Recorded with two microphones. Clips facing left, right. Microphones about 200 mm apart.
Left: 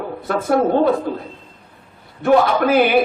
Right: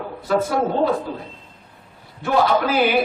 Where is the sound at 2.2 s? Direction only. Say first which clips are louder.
Left 4 dB; 55° left (ahead or behind).